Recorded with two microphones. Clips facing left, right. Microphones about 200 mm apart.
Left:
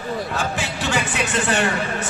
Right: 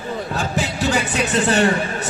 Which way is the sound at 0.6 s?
40° right (ahead or behind).